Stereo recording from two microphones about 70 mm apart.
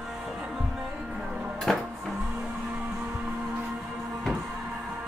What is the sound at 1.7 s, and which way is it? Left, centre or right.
Music, centre.